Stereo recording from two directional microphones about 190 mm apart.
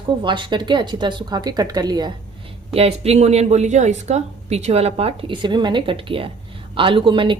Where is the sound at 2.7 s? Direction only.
30° right (ahead or behind).